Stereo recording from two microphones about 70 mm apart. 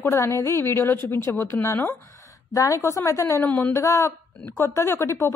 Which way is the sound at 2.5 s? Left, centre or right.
Left.